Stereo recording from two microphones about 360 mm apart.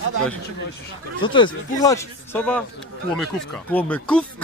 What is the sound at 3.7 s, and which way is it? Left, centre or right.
Speech, centre.